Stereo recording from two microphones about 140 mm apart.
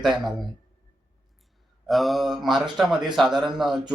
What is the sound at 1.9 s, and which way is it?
Speech, centre (ahead or behind).